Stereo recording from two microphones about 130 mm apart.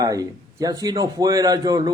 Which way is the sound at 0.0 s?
25° right (ahead or behind).